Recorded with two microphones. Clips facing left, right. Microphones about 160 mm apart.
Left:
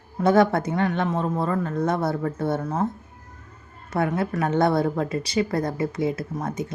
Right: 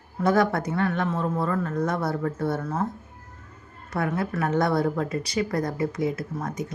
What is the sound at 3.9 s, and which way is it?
A woman's voice, 25° left (ahead or behind).